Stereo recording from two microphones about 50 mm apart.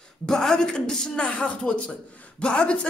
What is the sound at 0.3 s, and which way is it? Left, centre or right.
Speech, centre.